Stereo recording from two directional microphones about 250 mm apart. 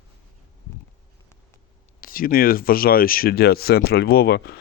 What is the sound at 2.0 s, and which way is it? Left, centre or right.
Speech, left.